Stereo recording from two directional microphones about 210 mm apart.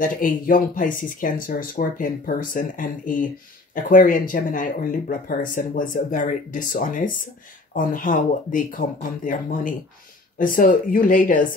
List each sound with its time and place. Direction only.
0.0 s speech: 40° left (ahead or behind)